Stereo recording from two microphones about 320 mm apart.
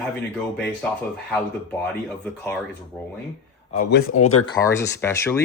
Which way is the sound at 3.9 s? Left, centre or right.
Left.